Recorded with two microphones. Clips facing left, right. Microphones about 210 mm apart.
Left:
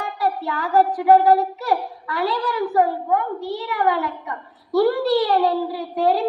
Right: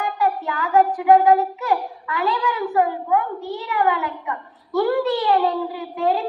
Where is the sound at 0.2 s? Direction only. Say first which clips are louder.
Left 1 dB; 35° left (ahead or behind).